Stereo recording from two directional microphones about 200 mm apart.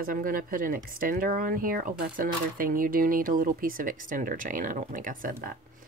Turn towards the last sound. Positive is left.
turn(degrees=-45)  # may be behind; listen again after turning